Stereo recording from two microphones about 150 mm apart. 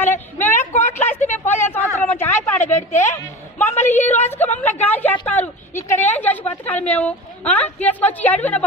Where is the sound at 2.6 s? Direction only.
50° left (ahead or behind).